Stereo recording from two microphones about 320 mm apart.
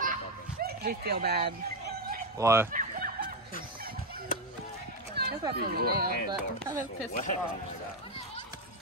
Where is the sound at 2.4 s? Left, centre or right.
Centre.